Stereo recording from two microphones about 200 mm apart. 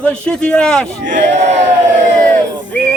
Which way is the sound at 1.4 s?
35° right (ahead or behind).